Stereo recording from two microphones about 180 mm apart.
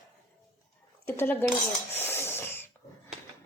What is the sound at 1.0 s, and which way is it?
Speech, 10° left (ahead or behind).